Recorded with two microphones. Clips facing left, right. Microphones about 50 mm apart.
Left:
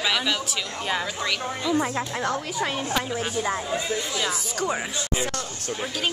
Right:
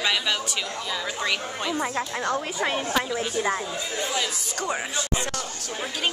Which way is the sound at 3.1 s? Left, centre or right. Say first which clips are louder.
Even; centre.